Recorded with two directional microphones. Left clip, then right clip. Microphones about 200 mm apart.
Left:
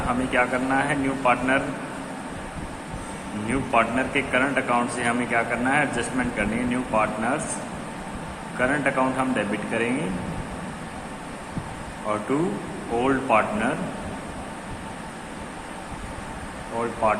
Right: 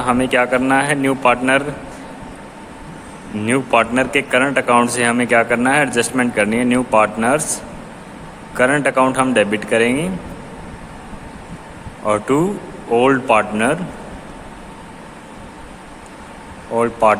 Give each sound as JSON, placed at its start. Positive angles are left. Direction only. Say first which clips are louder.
{"t": 0.1, "sound": "a man's voice", "louder": "right 8 dB", "side_deg": -55}
{"t": 3.4, "sound": "a man's voice", "louder": "right 7 dB", "side_deg": -55}
{"t": 8.5, "sound": "a man's voice", "louder": "right 8 dB", "side_deg": -55}
{"t": 12.0, "sound": "a man's voice", "louder": "right 9 dB", "side_deg": -55}
{"t": 16.7, "sound": "a man's voice", "louder": "right 9 dB", "side_deg": -55}